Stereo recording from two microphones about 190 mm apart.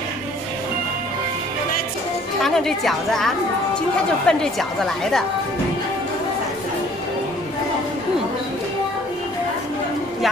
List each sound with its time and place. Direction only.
2.4 s a woman's voice: centre (ahead or behind)